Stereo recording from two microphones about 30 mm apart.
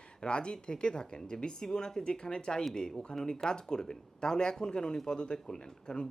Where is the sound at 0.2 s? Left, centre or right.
Left.